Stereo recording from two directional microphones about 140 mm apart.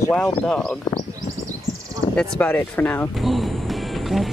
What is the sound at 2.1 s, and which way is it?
Speech, 10° left (ahead or behind).